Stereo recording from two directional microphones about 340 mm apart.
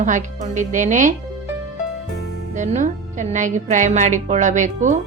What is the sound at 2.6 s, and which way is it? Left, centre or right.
Speech, right.